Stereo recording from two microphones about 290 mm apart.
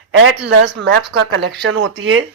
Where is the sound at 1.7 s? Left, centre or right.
Right.